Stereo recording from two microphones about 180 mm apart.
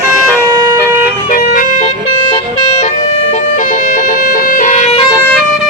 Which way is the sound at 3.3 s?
45° left (ahead or behind).